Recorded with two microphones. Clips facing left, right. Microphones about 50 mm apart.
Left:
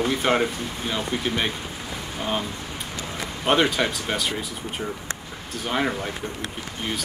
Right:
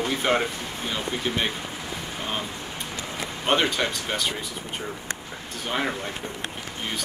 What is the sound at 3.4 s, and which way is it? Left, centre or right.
Speech, centre.